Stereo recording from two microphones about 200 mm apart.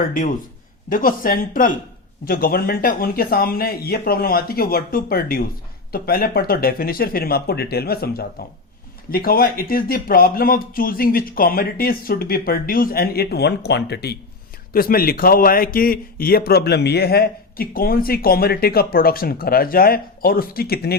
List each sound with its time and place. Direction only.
0.9 s speech: 45° left (ahead or behind)